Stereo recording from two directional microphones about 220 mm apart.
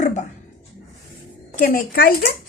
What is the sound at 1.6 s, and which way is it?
Speech, 40° left (ahead or behind).